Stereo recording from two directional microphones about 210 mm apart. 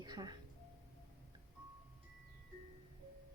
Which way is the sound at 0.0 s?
20° right (ahead or behind).